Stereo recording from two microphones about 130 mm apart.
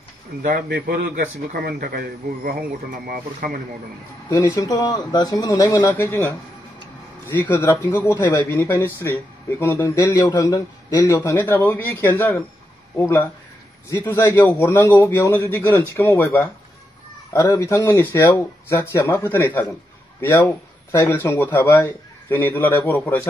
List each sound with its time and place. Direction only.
0.4 s a man's voice: 90° right
4.5 s speech: 30° left (ahead or behind)
11.1 s a man's voice: 15° left (ahead or behind)